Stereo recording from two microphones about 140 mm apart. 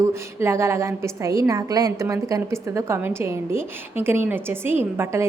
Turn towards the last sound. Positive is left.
turn(degrees=-20)  # may be behind; listen again after turning